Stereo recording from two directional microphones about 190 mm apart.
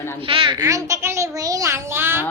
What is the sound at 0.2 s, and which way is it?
A child's voice, 30° right (ahead or behind).